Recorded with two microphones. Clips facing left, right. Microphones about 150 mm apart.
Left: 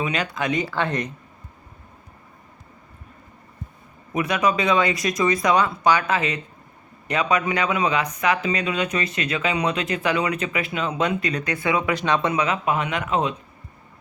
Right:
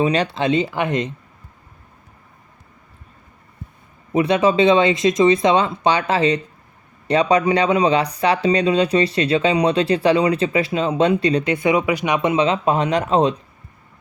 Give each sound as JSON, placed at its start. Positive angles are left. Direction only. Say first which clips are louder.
{"t": 0.0, "sound": "speech", "louder": "right 7 dB", "side_deg": -35}
{"t": 4.1, "sound": "speech", "louder": "right 6 dB", "side_deg": -30}